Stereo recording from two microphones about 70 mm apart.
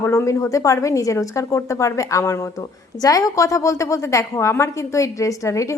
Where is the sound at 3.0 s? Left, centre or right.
Left.